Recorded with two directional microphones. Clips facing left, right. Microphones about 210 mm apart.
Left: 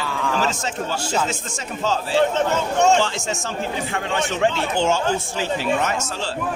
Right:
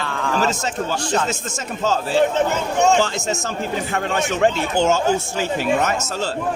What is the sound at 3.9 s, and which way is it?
Speech, 45° right (ahead or behind).